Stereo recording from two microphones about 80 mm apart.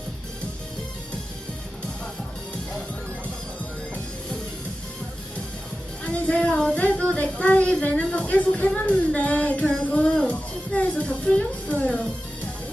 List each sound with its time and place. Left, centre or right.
6.1 s child singing: centre